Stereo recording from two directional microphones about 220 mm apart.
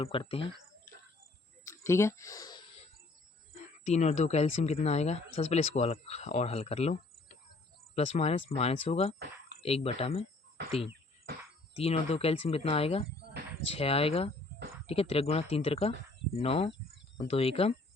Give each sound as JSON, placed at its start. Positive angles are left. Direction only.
{"t": 0.0, "sound": "speech", "side_deg": 25}
{"t": 1.7, "sound": "speech", "side_deg": 10}
{"t": 3.5, "sound": "speech", "side_deg": 30}
{"t": 7.9, "sound": "speech", "side_deg": 30}